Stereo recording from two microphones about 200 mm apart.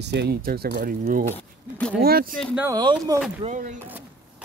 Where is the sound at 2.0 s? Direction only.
50° right (ahead or behind).